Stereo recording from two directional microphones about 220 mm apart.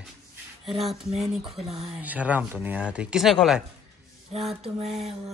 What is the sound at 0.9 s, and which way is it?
Speech, 30° right (ahead or behind).